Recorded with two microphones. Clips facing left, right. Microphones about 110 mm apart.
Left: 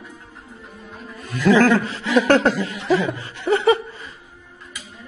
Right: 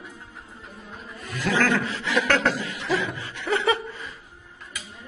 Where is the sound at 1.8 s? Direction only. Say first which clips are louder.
Left 7 dB; 35° left (ahead or behind).